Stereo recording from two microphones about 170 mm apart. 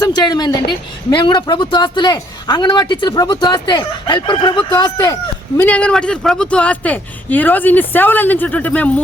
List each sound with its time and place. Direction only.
0.0 s speech: 25° left (ahead or behind)
5.5 s speech: 10° left (ahead or behind)